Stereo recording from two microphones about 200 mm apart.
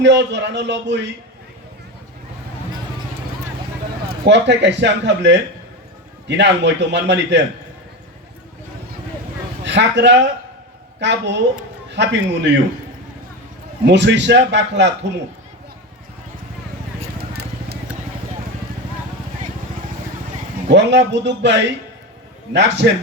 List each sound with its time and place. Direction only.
0.0 s a man's voice: 60° right (ahead or behind)
4.1 s a man's voice: 55° right (ahead or behind)
9.6 s a man's voice: 60° right (ahead or behind)
13.8 s a man's voice: 60° right (ahead or behind)
17.2 s vehicle: 50° right (ahead or behind)
20.7 s a man's voice: 60° right (ahead or behind)